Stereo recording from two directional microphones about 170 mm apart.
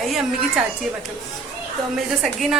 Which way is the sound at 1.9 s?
Centre (ahead or behind).